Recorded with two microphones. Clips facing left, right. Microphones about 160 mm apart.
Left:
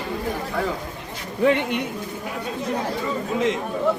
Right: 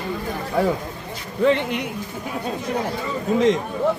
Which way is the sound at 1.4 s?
5° left (ahead or behind).